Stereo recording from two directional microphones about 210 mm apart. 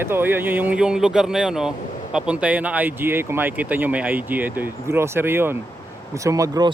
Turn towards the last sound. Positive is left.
turn(degrees=-15)  # may be behind; listen again after turning